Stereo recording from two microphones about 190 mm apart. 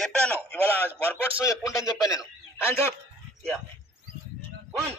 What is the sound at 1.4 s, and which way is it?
Speech, 15° left (ahead or behind).